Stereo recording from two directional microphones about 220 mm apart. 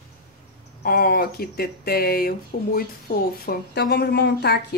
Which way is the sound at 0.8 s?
40° left (ahead or behind).